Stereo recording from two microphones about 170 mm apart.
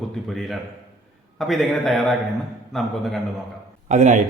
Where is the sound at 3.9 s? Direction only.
45° right (ahead or behind).